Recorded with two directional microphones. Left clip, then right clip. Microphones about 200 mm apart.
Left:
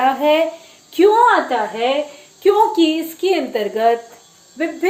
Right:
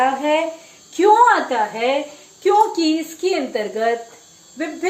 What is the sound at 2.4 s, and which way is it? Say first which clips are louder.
Speech: left 2 dB; 25° left (ahead or behind).